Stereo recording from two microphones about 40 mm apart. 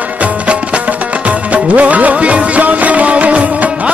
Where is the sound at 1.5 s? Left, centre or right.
Right.